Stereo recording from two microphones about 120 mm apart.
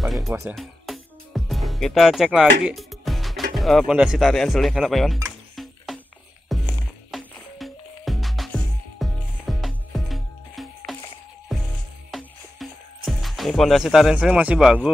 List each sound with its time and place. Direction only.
0.0 s music: centre (ahead or behind)
0.3 s speech: 15° right (ahead or behind)
0.6 s music: centre (ahead or behind)
4.3 s speech: 5° left (ahead or behind)
5.9 s music: centre (ahead or behind)